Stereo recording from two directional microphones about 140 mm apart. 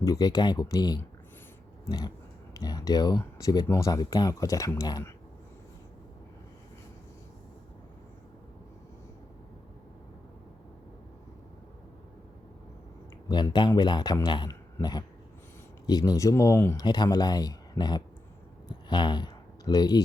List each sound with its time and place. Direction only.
0.0 s speech: 25° left (ahead or behind)
13.2 s speech: 30° left (ahead or behind)